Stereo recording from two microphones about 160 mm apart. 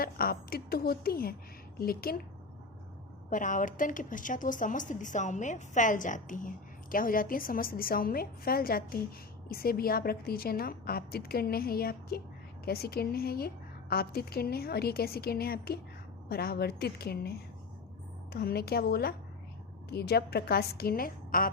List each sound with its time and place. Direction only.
0.0 s a woman's voice: 70° left (ahead or behind)
3.2 s a woman's voice: 55° left (ahead or behind)